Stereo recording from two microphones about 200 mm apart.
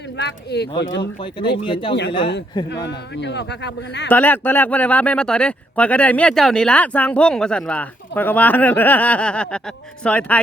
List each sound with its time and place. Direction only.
0.2 s speech: 60° left (ahead or behind)
1.2 s speech: 25° left (ahead or behind)
2.6 s speech: 60° left (ahead or behind)
4.1 s speech: 10° left (ahead or behind)